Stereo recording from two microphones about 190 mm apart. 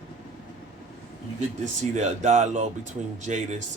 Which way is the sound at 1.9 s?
40° right (ahead or behind).